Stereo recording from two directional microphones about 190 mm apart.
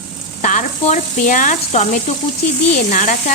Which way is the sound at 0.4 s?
40° left (ahead or behind).